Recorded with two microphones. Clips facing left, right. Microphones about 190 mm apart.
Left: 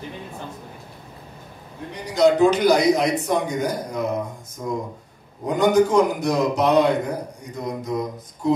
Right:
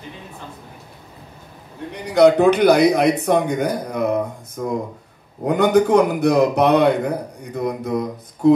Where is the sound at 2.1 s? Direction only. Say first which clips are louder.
Right 4 dB; 60° right (ahead or behind).